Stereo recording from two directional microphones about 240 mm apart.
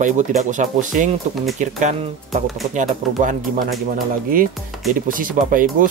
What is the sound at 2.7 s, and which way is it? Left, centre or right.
Speech, right.